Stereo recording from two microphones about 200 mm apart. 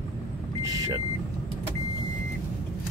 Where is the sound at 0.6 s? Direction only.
15° right (ahead or behind).